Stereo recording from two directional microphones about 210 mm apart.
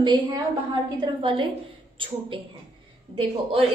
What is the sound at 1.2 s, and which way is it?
A woman's voice, 25° right (ahead or behind).